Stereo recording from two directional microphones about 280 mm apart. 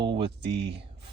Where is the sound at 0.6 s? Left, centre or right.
Right.